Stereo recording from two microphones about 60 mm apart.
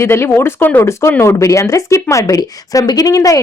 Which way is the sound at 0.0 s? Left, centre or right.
Left.